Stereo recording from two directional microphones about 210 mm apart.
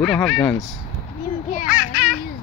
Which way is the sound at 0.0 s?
5° left (ahead or behind).